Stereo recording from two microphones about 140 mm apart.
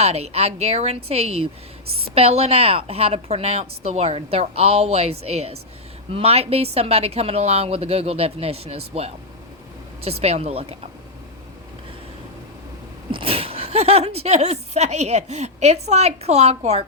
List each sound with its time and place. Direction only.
0.0 s speech: 45° right (ahead or behind)
13.1 s speech: 40° right (ahead or behind)